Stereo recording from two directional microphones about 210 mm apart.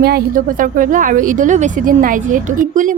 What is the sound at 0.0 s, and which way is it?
A woman's voice, 45° right (ahead or behind).